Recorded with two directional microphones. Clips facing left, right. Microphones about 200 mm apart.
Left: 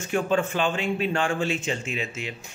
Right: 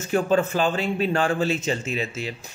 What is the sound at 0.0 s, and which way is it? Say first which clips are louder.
A man's voice: right 3 dB; 40° right (ahead or behind).